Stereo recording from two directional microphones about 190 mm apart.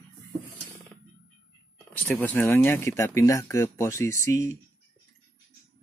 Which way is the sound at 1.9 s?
10° left (ahead or behind).